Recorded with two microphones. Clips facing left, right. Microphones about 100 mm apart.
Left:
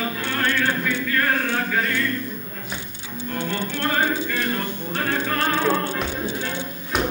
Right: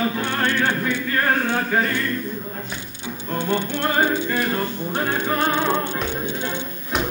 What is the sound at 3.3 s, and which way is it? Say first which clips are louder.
Music: right 4 dB; 20° right (ahead or behind).